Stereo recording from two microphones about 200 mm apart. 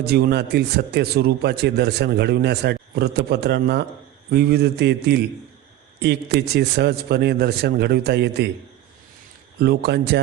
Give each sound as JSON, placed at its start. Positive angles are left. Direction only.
{"t": 0.0, "sound": "a man's voice", "side_deg": -55}
{"t": 9.6, "sound": "a man's voice", "side_deg": -55}